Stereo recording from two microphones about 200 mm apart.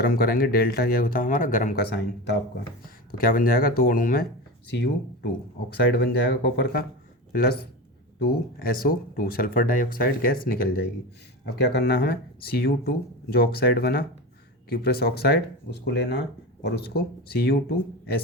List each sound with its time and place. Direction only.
0.0 s speech: 50° left (ahead or behind)
3.1 s speech: 45° left (ahead or behind)
4.7 s speech: 55° left (ahead or behind)
8.2 s speech: 50° left (ahead or behind)